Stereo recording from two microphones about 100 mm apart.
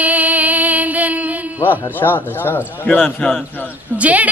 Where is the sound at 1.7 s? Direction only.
20° left (ahead or behind).